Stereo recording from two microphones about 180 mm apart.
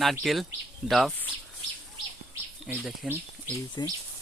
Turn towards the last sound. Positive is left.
turn(degrees=20)  # may be behind; listen again after turning